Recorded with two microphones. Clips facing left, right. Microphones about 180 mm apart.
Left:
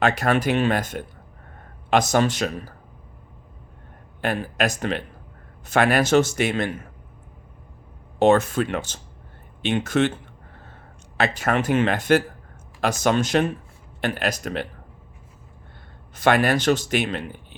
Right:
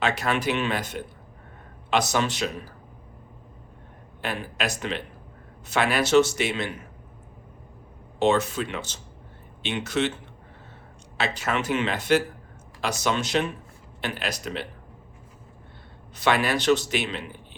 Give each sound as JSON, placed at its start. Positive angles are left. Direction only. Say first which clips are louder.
{"t": 0.0, "sound": "speech", "louder": "left 5 dB", "side_deg": 45}
{"t": 4.2, "sound": "speech", "louder": "left 6 dB", "side_deg": 50}
{"t": 8.2, "sound": "speech", "louder": "left 5 dB", "side_deg": 50}
{"t": 11.2, "sound": "speech", "louder": "left 5 dB", "side_deg": 50}
{"t": 16.1, "sound": "speech", "louder": "left 4 dB", "side_deg": 50}